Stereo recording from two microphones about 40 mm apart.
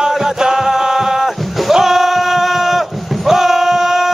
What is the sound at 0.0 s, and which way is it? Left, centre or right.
Music, centre.